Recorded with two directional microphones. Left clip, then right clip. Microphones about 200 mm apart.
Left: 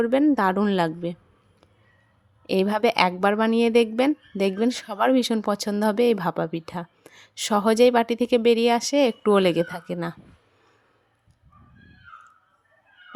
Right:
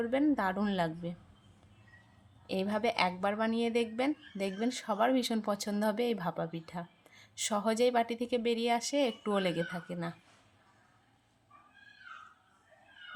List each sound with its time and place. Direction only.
0.0 s a woman's voice: 40° left (ahead or behind)
2.5 s a woman's voice: 45° left (ahead or behind)